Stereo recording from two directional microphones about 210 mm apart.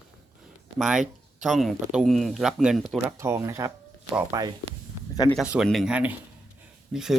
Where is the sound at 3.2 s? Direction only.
15° right (ahead or behind).